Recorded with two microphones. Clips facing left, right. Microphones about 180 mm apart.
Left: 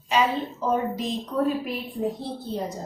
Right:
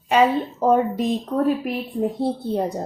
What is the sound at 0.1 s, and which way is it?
A woman's voice, 55° right (ahead or behind).